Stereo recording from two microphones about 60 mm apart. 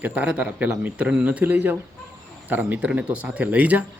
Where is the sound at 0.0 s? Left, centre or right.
Right.